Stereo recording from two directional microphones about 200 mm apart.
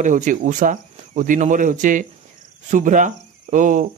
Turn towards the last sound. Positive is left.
turn(degrees=-40)  # may be behind; listen again after turning